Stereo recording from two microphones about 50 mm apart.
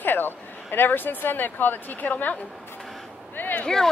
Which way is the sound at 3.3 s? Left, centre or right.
Left.